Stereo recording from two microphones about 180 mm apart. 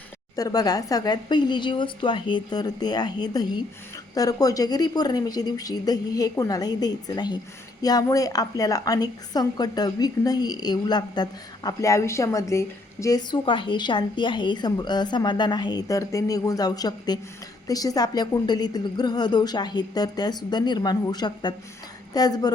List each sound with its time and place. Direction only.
0.3 s a woman's voice: 20° left (ahead or behind)